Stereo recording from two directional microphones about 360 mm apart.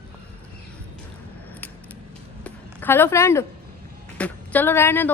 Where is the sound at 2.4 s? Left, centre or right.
Centre.